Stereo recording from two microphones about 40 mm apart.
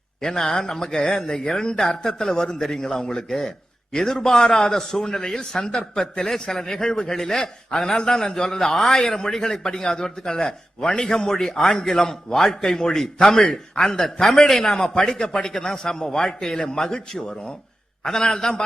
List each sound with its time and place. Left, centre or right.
0.2 s a man's voice: centre